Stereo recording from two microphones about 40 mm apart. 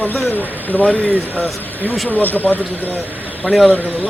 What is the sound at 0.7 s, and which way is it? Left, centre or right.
Speech, left.